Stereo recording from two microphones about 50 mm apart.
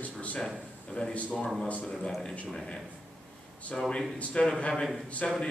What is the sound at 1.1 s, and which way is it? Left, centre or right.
Speech, left.